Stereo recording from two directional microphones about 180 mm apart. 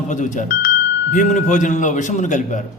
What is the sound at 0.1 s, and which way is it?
A man's voice, 45° left (ahead or behind).